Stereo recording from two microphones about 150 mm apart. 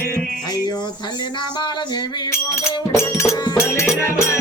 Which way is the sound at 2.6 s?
20° left (ahead or behind).